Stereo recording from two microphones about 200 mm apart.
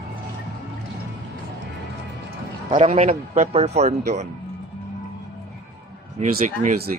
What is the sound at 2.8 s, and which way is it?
A man's voice, 30° right (ahead or behind).